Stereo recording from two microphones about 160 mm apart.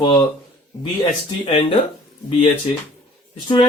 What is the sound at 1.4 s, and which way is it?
Speech, 35° left (ahead or behind).